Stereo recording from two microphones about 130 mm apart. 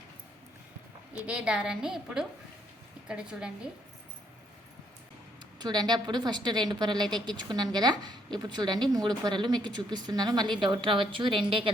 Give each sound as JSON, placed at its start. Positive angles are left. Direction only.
{"t": 1.3, "sound": "a woman's voice", "side_deg": -5}
{"t": 5.5, "sound": "a woman's voice", "side_deg": -35}